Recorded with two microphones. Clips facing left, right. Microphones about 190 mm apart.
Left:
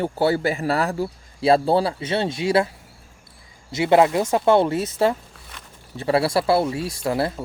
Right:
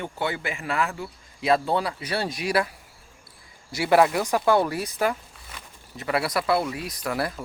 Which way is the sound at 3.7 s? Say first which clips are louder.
Left 3 dB; 20° left (ahead or behind).